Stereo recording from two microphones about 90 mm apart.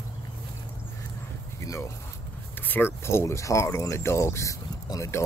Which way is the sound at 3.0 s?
30° left (ahead or behind).